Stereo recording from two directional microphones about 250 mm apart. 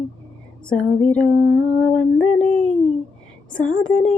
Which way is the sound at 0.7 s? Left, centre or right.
Centre.